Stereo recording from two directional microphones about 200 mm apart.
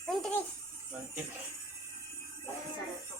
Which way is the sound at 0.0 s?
Centre (ahead or behind).